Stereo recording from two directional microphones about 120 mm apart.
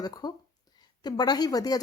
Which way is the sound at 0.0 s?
35° left (ahead or behind).